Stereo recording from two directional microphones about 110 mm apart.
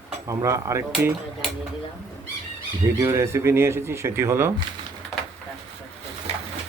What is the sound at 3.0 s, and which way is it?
Speech, 25° right (ahead or behind).